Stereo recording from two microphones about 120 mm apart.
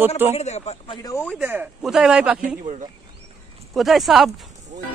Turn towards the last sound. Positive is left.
turn(degrees=0)  # may be behind; listen again after turning